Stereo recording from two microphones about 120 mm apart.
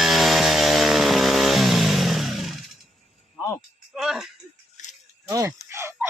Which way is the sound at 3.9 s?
5° right (ahead or behind).